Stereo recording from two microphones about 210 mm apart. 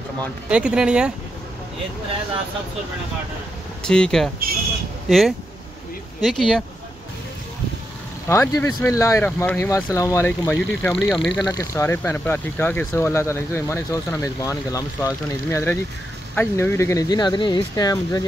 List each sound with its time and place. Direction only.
0.5 s speech: 5° right (ahead or behind)
3.8 s speech: 5° left (ahead or behind)
8.3 s speech: 15° left (ahead or behind)
11.3 s speech: 15° left (ahead or behind)